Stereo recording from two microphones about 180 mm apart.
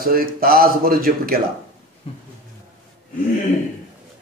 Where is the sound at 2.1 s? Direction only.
30° left (ahead or behind).